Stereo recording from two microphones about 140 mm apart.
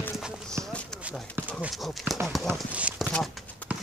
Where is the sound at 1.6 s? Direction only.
Centre (ahead or behind).